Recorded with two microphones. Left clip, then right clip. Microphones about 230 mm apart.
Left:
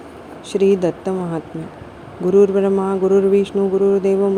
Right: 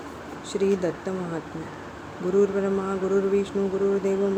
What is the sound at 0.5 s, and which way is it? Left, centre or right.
Speech, left.